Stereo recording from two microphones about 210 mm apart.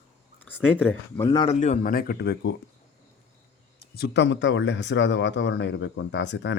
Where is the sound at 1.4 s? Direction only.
35° left (ahead or behind); by 2.5 s 55° left (ahead or behind).